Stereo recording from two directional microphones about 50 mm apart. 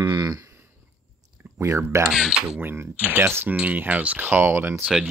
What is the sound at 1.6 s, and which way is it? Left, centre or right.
Speech, right.